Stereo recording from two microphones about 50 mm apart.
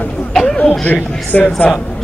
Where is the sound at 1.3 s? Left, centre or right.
Centre.